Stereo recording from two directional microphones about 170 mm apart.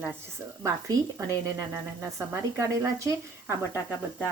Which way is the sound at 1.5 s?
15° right (ahead or behind).